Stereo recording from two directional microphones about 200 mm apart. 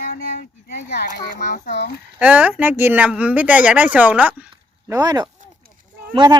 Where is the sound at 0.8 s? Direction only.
55° left (ahead or behind).